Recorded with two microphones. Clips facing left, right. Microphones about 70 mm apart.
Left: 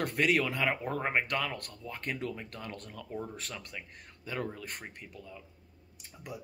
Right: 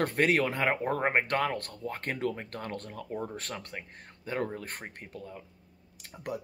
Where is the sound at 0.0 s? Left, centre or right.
Right.